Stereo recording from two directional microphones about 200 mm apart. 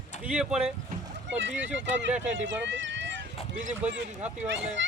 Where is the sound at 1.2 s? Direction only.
65° right (ahead or behind).